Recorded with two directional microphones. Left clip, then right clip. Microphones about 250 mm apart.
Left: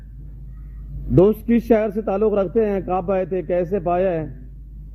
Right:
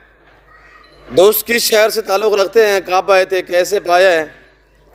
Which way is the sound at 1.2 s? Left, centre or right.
Centre.